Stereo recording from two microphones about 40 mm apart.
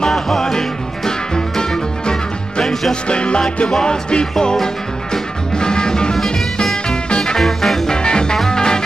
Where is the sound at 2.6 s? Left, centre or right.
Centre.